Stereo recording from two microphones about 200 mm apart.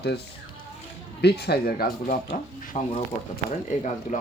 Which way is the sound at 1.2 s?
55° left (ahead or behind).